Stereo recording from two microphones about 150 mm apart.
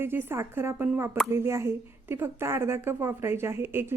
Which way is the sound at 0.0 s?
15° right (ahead or behind).